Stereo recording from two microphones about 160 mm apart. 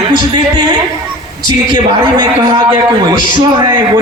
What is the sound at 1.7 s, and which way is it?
A man's voice, 30° right (ahead or behind).